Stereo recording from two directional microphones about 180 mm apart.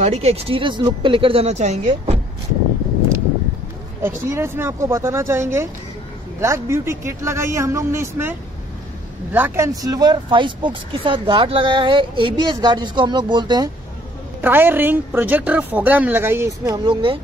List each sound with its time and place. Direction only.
0.0 s speech: 35° right (ahead or behind)
4.0 s a woman's voice: 15° right (ahead or behind)
14.4 s a woman's voice: 10° right (ahead or behind); by 17.2 s 25° right (ahead or behind)